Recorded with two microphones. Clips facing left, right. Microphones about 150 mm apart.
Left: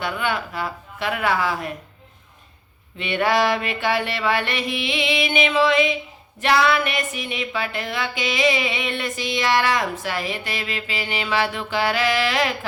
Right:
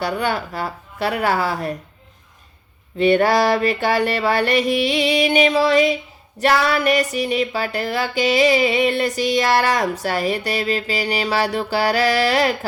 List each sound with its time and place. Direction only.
0.0 s speech: 40° right (ahead or behind)
3.0 s speech: 40° right (ahead or behind)